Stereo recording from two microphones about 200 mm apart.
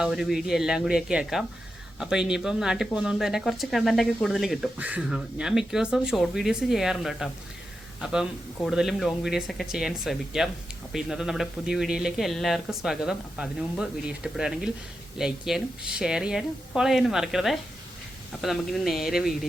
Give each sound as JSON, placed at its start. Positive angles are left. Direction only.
{"t": 0.0, "sound": "speech", "side_deg": 0}